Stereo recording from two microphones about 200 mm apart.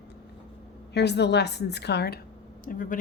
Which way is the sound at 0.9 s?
55° left (ahead or behind).